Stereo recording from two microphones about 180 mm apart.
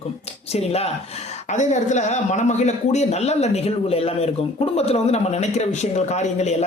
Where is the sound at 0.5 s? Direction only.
35° left (ahead or behind).